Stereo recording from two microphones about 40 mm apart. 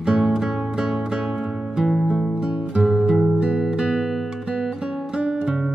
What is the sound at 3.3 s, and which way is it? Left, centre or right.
Music, right.